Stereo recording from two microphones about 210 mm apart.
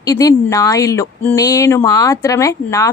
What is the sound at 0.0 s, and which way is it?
Speech, 15° left (ahead or behind).